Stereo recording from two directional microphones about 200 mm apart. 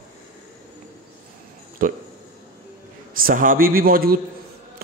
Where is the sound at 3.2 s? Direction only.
45° right (ahead or behind).